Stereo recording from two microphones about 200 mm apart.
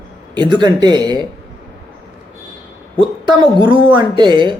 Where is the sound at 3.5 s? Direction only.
25° right (ahead or behind).